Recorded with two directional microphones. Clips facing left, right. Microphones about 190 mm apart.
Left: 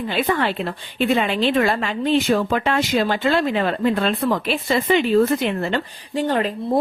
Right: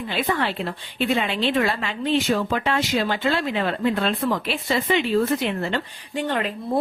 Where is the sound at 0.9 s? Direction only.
45° left (ahead or behind).